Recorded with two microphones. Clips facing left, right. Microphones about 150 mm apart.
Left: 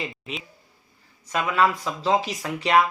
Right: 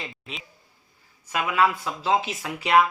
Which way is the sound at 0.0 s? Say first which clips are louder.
Left 5 dB; centre (ahead or behind).